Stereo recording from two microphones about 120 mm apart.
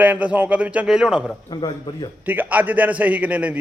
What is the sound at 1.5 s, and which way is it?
Speech, 40° left (ahead or behind).